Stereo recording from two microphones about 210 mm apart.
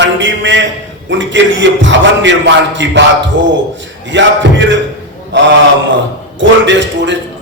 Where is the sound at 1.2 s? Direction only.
60° right (ahead or behind).